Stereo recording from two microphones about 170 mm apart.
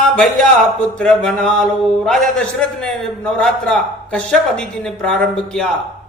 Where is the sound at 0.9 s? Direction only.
5° left (ahead or behind).